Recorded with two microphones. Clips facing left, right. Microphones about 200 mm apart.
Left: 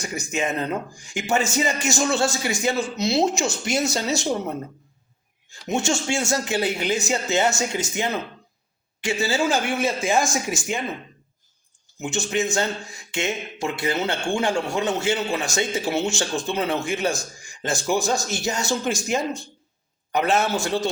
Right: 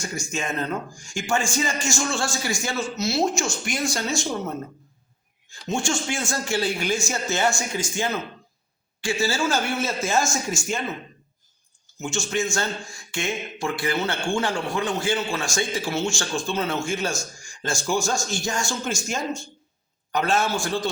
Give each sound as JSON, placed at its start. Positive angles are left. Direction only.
{"t": 0.0, "sound": "speech", "side_deg": 20}
{"t": 11.9, "sound": "speech", "side_deg": 20}
{"t": 20.1, "sound": "speech", "side_deg": 20}